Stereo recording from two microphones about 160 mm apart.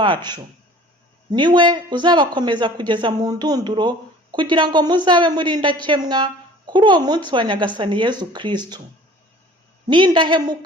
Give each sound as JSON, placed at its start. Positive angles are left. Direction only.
{"t": 0.0, "sound": "a man's voice", "side_deg": -30}
{"t": 9.9, "sound": "a man's voice", "side_deg": -30}